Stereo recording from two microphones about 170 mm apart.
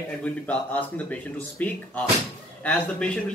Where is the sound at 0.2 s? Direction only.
10° left (ahead or behind).